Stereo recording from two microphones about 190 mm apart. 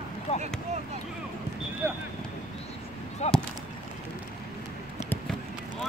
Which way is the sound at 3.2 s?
35° left (ahead or behind).